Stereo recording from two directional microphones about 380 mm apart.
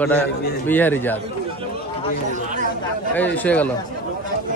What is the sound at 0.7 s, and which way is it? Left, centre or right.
Speech, centre.